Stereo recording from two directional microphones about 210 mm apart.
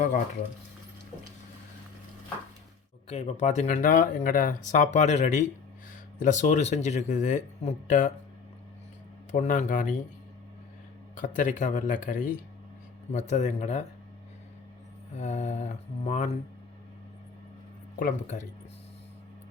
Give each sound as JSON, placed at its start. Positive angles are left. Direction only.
{"t": 3.1, "sound": "speech", "side_deg": 30}
{"t": 9.3, "sound": "speech", "side_deg": 35}
{"t": 11.2, "sound": "speech", "side_deg": 35}
{"t": 15.1, "sound": "speech", "side_deg": 35}
{"t": 18.0, "sound": "speech", "side_deg": 35}